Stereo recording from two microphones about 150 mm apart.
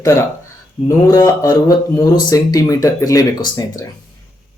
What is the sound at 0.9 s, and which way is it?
Speech, 20° left (ahead or behind).